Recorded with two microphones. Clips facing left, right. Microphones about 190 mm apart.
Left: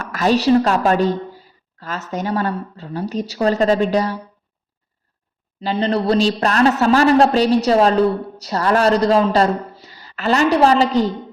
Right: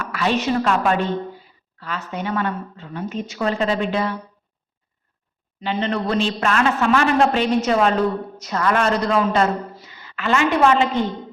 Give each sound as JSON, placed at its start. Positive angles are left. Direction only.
{"t": 0.0, "sound": "a woman's voice", "side_deg": 40}
{"t": 5.5, "sound": "a woman's voice", "side_deg": 35}